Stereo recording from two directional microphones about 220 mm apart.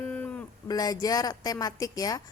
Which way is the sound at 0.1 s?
5° left (ahead or behind).